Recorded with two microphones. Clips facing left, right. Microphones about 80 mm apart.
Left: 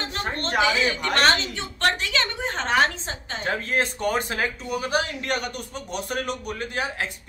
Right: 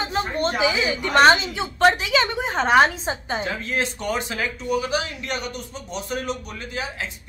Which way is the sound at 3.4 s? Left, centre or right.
Left.